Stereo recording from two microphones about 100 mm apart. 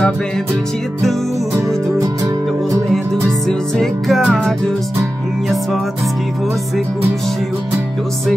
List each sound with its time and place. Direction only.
2.9 s music: 5° left (ahead or behind)